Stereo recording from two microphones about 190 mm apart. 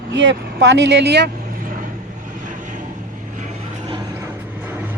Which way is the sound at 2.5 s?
40° right (ahead or behind).